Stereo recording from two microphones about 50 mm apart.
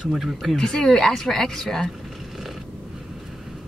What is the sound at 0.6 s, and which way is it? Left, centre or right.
Speech, centre.